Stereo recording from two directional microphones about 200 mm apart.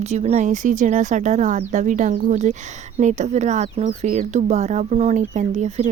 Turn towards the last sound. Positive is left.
turn(degrees=-35)  # may be behind; listen again after turning